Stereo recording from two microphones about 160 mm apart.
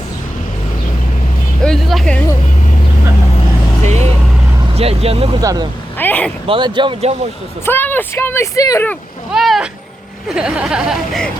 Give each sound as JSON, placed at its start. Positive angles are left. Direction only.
{"t": 1.6, "sound": "speech", "side_deg": 0}
{"t": 4.7, "sound": "speech", "side_deg": -40}
{"t": 5.4, "sound": "speech", "side_deg": -20}
{"t": 6.0, "sound": "speech", "side_deg": 10}
{"t": 6.5, "sound": "speech", "side_deg": -30}
{"t": 7.6, "sound": "speech", "side_deg": 15}
{"t": 9.3, "sound": "speech", "side_deg": 0}